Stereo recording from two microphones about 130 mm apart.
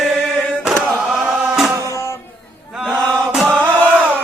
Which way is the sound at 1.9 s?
20° left (ahead or behind).